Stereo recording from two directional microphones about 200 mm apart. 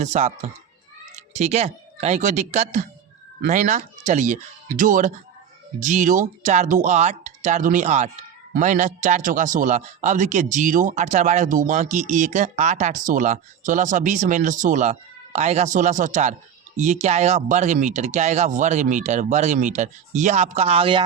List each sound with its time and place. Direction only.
0.0 s a man's voice: 35° right (ahead or behind)